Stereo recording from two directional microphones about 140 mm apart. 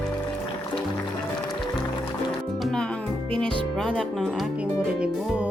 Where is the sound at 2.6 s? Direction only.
5° left (ahead or behind).